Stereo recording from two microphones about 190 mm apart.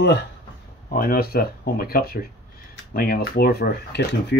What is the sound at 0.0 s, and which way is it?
Speech, 65° left (ahead or behind).